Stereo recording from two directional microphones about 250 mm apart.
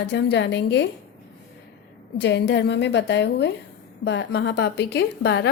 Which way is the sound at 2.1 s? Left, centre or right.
Left.